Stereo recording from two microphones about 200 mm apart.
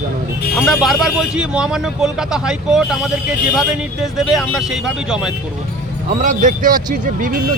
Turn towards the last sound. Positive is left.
turn(degrees=-40)  # may be behind; listen again after turning